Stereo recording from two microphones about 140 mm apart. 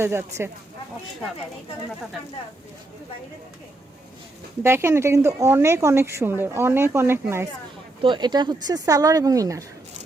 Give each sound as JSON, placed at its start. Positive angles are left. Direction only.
{"t": 0.0, "sound": "speech", "side_deg": -20}
{"t": 4.6, "sound": "speech", "side_deg": -20}
{"t": 8.0, "sound": "speech", "side_deg": -30}